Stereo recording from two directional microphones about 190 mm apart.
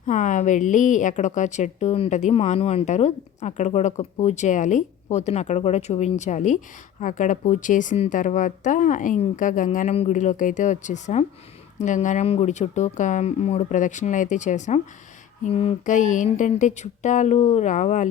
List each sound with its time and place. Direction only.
0.0 s a woman's voice: 40° left (ahead or behind)